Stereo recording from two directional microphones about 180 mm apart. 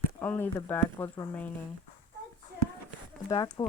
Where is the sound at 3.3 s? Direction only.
20° left (ahead or behind).